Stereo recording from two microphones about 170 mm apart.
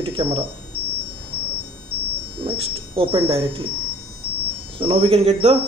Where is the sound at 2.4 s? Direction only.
30° right (ahead or behind).